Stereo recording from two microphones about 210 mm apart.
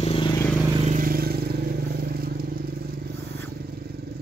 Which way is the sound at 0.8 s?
40° right (ahead or behind).